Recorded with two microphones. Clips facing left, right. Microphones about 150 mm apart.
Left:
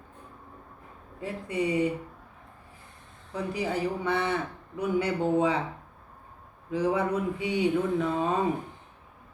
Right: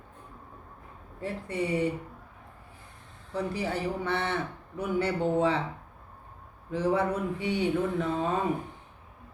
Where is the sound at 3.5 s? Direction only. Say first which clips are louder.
Left 5 dB; 15° left (ahead or behind).